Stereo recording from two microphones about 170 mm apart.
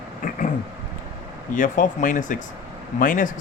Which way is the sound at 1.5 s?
50° left (ahead or behind).